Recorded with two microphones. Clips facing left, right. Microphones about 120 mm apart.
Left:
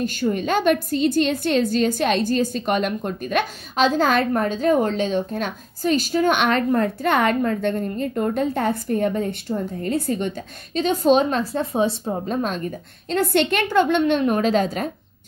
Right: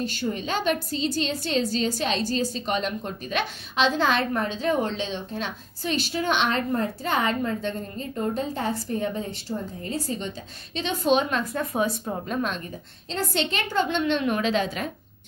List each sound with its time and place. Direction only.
0.0 s a woman's voice: 50° left (ahead or behind)
10.8 s a woman's voice: 40° left (ahead or behind)
13.1 s a woman's voice: 60° left (ahead or behind); by 14.9 s 45° left (ahead or behind)